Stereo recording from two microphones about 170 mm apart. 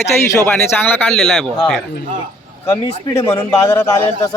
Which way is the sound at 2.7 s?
15° left (ahead or behind).